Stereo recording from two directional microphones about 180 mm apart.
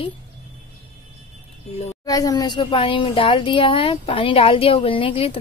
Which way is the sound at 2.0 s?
20° left (ahead or behind).